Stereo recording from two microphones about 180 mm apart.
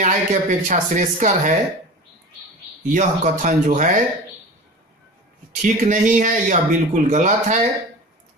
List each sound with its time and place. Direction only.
0.0 s speech: 40° right (ahead or behind)
2.9 s speech: 40° right (ahead or behind)
5.6 s speech: 45° right (ahead or behind)